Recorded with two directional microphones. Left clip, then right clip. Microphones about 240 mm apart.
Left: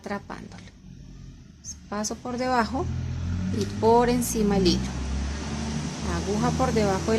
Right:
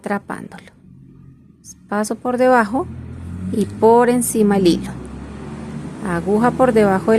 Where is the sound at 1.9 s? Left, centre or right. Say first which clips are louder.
Right 11 dB; right.